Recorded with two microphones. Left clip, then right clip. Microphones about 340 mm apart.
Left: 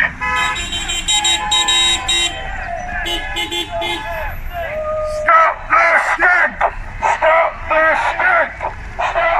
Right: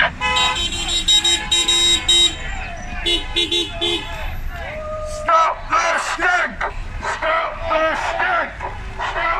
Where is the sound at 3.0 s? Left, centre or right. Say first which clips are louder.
Right 5 dB; centre.